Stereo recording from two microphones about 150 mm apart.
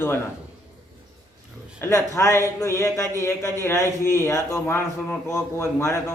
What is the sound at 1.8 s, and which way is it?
A man's voice, 20° left (ahead or behind).